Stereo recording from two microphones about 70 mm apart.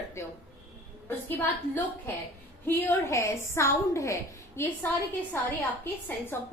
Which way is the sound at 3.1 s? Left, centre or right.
Left.